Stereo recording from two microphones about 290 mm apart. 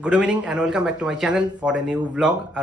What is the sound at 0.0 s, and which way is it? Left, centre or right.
Speech, centre.